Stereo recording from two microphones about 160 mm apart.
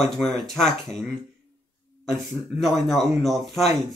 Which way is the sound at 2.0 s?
Centre (ahead or behind).